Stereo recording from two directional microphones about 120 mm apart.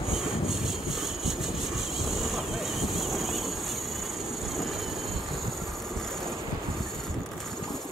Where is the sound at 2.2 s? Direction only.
Centre (ahead or behind).